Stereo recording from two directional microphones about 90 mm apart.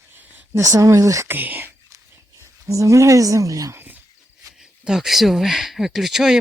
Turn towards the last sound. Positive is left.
turn(degrees=-5)  # may be behind; listen again after turning